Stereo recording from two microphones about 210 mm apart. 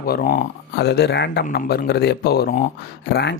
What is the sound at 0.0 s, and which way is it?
Speech, 45° left (ahead or behind).